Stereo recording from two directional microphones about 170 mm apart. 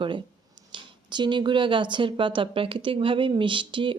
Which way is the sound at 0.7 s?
25° right (ahead or behind).